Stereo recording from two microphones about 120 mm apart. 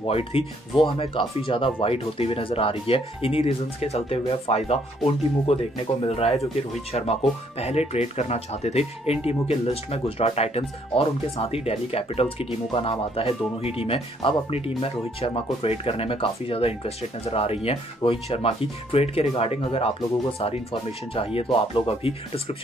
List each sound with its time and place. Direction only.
0.0 s speech: 50° left (ahead or behind)